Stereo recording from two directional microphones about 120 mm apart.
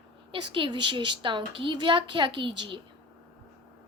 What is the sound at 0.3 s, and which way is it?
A woman's voice, 45° right (ahead or behind).